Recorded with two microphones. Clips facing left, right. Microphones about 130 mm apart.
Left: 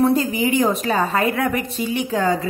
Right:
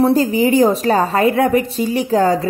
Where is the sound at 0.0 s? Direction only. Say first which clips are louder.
Right 4 dB; 35° right (ahead or behind).